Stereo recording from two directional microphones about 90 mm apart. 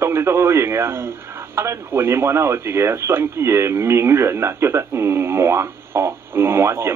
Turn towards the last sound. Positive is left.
turn(degrees=-30)  # may be behind; listen again after turning